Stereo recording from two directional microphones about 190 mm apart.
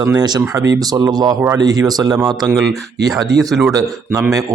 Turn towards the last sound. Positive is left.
turn(degrees=-15)  # may be behind; listen again after turning